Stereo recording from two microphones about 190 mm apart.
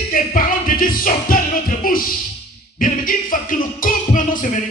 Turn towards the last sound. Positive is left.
turn(degrees=45)  # may be behind; listen again after turning